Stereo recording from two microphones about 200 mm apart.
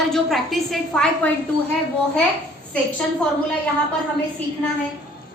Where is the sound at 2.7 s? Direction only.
5° left (ahead or behind).